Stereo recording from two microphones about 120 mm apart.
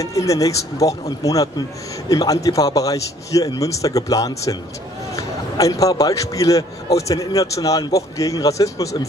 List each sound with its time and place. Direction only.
0.0 s a man's voice: 25° left (ahead or behind)